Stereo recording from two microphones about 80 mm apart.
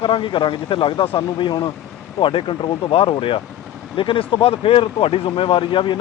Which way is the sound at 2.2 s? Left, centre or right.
Left.